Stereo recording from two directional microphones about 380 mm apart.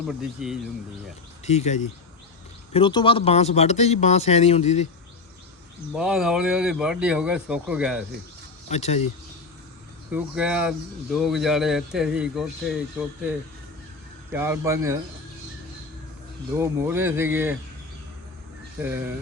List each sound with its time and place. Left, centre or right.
0.1 s speech: centre
1.5 s speech: centre
5.9 s speech: centre
8.7 s speech: centre
10.1 s speech: centre
14.3 s speech: centre
16.6 s speech: centre
18.8 s speech: centre